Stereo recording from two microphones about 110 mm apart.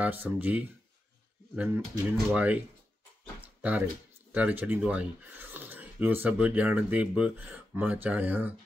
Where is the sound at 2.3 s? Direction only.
15° right (ahead or behind).